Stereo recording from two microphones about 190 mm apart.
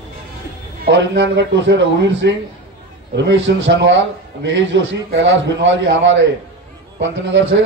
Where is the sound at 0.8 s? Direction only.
70° right (ahead or behind).